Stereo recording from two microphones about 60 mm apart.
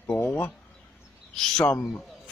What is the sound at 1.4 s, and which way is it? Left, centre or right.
Speech, centre.